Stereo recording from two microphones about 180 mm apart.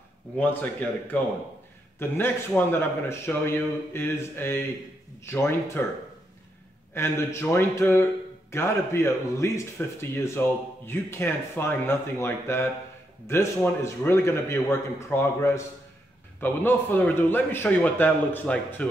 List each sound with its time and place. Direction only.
0.4 s a man's voice: 10° left (ahead or behind)
6.9 s a man's voice: 15° left (ahead or behind)